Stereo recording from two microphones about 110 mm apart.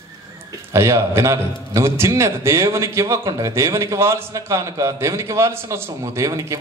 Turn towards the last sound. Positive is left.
turn(degrees=-30)  # may be behind; listen again after turning